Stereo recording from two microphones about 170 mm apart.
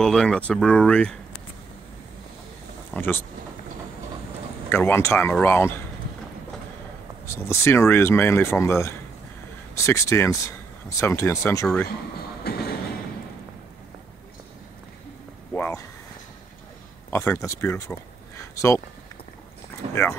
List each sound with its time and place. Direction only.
0.0 s speech: 5° left (ahead or behind)
2.9 s speech: 10° left (ahead or behind)
4.6 s speech: 15° left (ahead or behind)
7.2 s speech: 15° left (ahead or behind)
12.4 s a sound: 65° left (ahead or behind)
15.5 s a sound: 10° left (ahead or behind)
17.1 s speech: 15° left (ahead or behind)
18.4 s a sound: 15° left (ahead or behind)
19.9 s speech: 15° left (ahead or behind)